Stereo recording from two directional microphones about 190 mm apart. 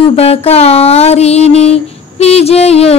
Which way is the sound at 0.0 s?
30° left (ahead or behind).